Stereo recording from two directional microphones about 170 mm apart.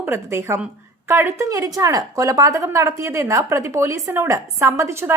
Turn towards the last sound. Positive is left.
turn(degrees=-15)  # may be behind; listen again after turning